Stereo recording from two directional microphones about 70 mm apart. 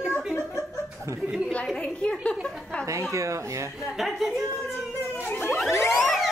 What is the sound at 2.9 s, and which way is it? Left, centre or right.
Chuckle, right.